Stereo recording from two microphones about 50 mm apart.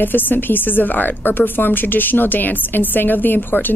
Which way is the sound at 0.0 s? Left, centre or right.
Left.